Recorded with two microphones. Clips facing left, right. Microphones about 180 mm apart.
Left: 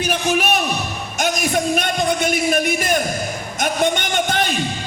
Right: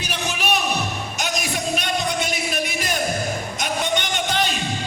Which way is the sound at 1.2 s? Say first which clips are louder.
Left 7 dB; 50° left (ahead or behind).